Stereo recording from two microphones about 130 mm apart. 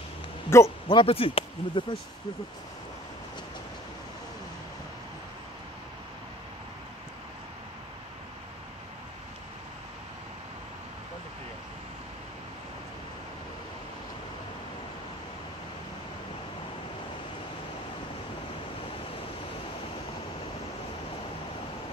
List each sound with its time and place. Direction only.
0.5 s a man's voice: 20° left (ahead or behind)
0.8 s speech: 45° left (ahead or behind)